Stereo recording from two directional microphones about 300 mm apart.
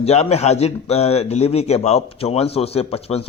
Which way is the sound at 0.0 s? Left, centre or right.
Left.